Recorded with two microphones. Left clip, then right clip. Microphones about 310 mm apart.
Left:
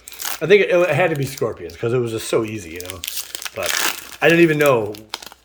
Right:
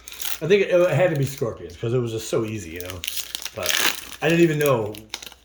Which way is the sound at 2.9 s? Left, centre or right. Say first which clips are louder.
Left 1 dB; centre.